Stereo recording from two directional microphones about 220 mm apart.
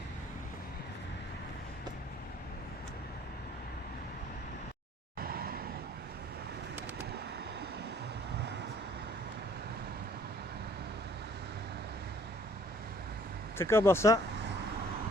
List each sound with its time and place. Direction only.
5.2 s vehicle: 40° right (ahead or behind)
13.6 s speech: 10° left (ahead or behind)